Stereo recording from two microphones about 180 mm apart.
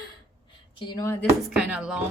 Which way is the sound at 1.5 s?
5° right (ahead or behind).